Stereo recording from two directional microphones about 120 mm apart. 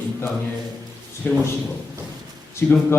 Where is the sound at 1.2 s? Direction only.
20° left (ahead or behind).